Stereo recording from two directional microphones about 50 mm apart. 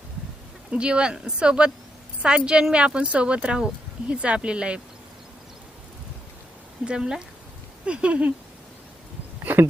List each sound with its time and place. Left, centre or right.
0.7 s a woman's voice: right
6.8 s a woman's voice: centre
9.4 s a sound: right